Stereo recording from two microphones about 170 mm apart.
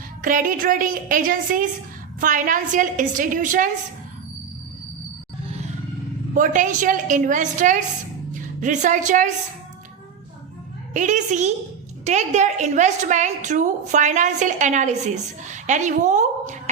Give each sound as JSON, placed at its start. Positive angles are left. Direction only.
{"t": 0.2, "sound": "a woman's voice", "side_deg": -50}
{"t": 6.3, "sound": "a woman's voice", "side_deg": -50}
{"t": 10.9, "sound": "a woman's voice", "side_deg": -45}